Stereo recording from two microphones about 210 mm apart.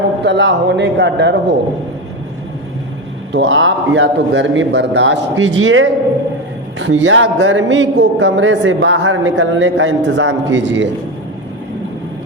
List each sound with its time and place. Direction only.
0.2 s a man's voice: 55° right (ahead or behind)
3.3 s a man's voice: 60° right (ahead or behind)